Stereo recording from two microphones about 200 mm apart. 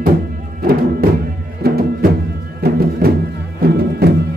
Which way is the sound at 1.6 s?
50° right (ahead or behind).